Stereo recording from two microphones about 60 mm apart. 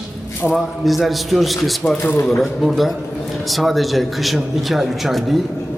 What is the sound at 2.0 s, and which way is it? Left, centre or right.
Speech, left.